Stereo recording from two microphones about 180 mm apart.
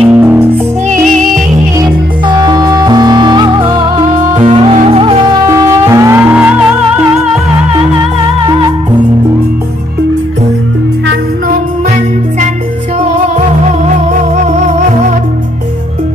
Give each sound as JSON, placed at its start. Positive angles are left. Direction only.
{"t": 0.0, "sound": "music", "side_deg": -10}
{"t": 1.8, "sound": "music", "side_deg": -25}
{"t": 14.4, "sound": "music", "side_deg": -40}